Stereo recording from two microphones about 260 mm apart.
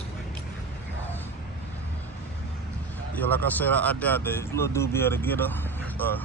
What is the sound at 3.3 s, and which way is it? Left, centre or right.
Speech, centre.